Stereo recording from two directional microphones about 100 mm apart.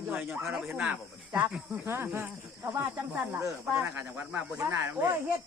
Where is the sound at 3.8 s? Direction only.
20° right (ahead or behind).